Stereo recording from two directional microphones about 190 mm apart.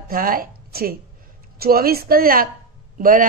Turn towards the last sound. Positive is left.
turn(degrees=-45)  # may be behind; listen again after turning